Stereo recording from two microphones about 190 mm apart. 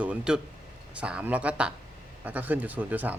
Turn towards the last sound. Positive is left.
turn(degrees=-10)  # may be behind; listen again after turning